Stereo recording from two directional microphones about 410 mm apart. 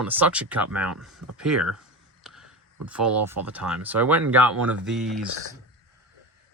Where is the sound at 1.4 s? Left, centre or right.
Right.